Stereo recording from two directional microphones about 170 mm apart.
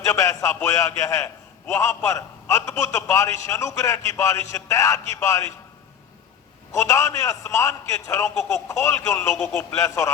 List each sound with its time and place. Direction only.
0.0 s a man's voice: 20° left (ahead or behind)
6.7 s a man's voice: 15° left (ahead or behind)
9.3 s a man's voice: 5° left (ahead or behind)
9.7 s a man's voice: 20° left (ahead or behind)